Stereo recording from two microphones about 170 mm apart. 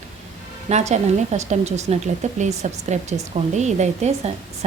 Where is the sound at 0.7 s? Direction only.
40° right (ahead or behind).